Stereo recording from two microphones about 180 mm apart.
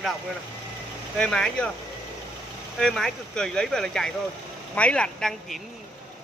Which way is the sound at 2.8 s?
5° left (ahead or behind).